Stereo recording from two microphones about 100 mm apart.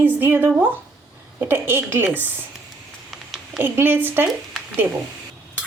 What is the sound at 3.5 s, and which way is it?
Speech, 20° right (ahead or behind).